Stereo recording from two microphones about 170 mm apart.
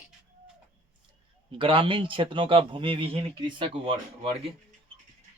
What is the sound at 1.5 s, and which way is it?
Speech, 30° right (ahead or behind).